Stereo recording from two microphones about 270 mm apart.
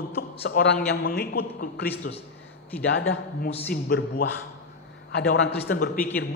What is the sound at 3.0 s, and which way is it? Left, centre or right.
A man's voice, left.